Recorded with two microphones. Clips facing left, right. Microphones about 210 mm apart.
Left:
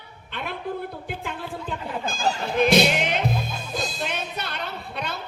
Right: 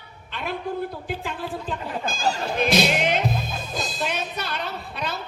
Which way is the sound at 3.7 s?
55° left (ahead or behind).